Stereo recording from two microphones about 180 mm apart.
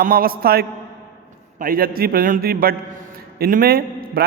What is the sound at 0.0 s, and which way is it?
A man's voice, 55° right (ahead or behind).